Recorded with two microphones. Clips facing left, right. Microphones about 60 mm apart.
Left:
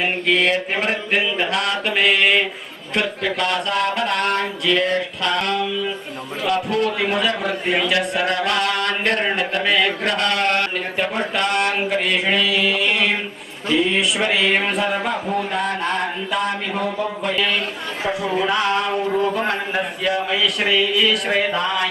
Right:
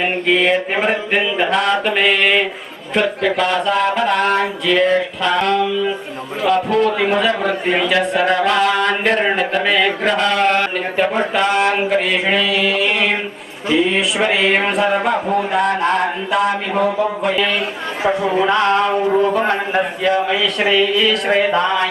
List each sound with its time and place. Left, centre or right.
0.0 s a man's voice: centre